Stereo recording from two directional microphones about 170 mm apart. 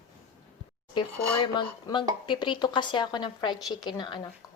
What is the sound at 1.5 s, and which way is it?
A woman's voice, 25° left (ahead or behind).